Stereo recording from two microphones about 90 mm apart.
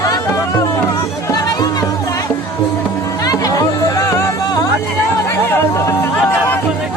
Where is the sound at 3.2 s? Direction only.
40° left (ahead or behind).